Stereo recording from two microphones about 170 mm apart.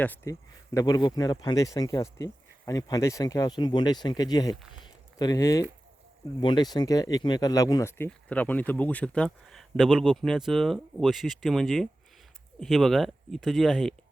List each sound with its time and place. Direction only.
0.0 s speech: 15° left (ahead or behind)
4.8 s a sound: 20° left (ahead or behind)
6.4 s speech: 25° left (ahead or behind); by 13.9 s centre (ahead or behind)